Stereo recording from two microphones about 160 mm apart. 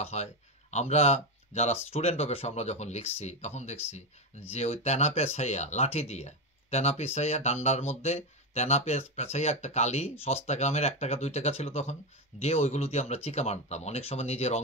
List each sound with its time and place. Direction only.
0.0 s speech: 45° left (ahead or behind)